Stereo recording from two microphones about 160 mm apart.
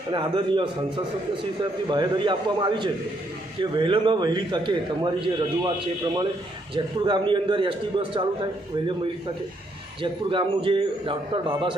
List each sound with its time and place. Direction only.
0.1 s a man's voice: 30° right (ahead or behind)
10.0 s a man's voice: 35° right (ahead or behind)